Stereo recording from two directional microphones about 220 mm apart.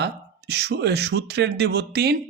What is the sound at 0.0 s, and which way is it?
Speech, 50° right (ahead or behind).